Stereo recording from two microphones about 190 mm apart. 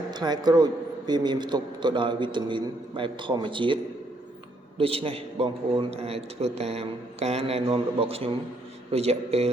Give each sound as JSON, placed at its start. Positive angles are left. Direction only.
{"t": 0.1, "sound": "a man's voice", "side_deg": -20}
{"t": 4.8, "sound": "a man's voice", "side_deg": -30}